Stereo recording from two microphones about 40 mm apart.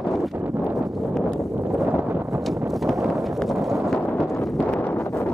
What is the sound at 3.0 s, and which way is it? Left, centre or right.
Clip-clop, centre.